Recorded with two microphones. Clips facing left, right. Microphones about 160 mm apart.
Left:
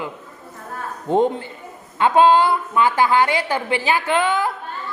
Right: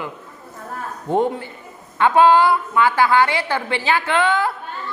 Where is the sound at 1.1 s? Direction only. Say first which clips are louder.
Left 2 dB; 20° left (ahead or behind).